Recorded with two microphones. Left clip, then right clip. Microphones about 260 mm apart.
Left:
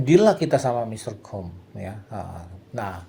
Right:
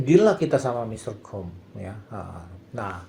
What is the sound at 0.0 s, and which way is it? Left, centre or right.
Speech, left.